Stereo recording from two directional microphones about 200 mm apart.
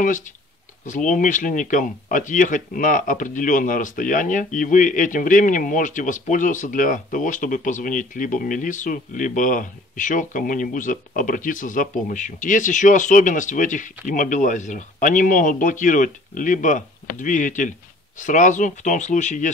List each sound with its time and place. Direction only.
0.0 s speech: 40° left (ahead or behind)